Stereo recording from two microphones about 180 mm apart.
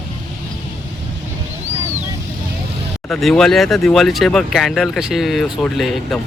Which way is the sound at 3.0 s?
5° left (ahead or behind).